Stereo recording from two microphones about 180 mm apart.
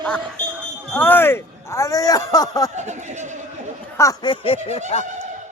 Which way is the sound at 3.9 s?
20° left (ahead or behind).